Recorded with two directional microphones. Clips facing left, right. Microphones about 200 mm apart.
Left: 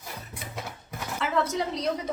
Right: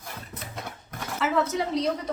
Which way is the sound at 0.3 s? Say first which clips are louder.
Even; centre (ahead or behind).